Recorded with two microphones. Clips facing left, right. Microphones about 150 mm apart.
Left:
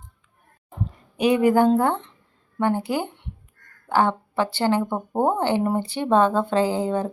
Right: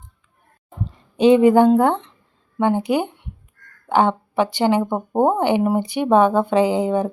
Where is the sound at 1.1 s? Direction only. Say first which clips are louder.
Right 6 dB; 25° right (ahead or behind).